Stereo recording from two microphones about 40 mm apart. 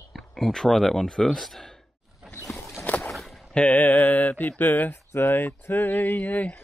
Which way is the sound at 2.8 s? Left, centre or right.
Left.